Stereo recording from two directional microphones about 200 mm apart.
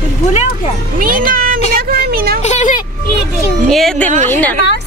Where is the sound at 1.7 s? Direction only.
50° right (ahead or behind).